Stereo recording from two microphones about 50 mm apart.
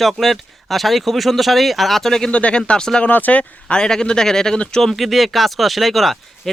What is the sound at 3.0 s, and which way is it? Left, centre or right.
Speech, left.